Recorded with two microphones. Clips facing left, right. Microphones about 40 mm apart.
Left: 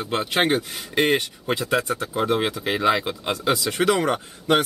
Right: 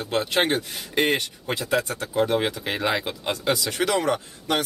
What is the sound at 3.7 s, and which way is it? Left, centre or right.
Speech, left.